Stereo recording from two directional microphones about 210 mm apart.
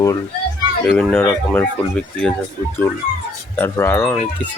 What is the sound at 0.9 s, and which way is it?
Speech, 5° left (ahead or behind).